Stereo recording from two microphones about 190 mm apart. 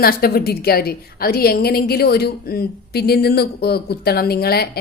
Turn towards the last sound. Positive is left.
turn(degrees=55)  # may be behind; listen again after turning